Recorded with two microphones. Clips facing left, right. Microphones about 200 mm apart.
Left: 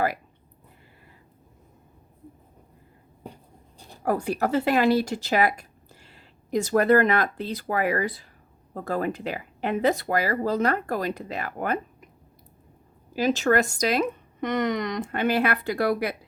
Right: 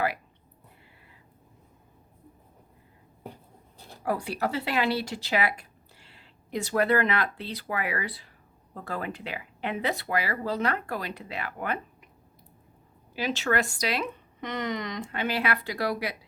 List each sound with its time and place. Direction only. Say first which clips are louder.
4.0 s speech: left 4 dB; 45° left (ahead or behind)
13.1 s speech: left 6 dB; 45° left (ahead or behind)